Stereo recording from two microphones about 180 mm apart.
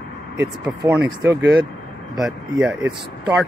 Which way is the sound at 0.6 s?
5° right (ahead or behind).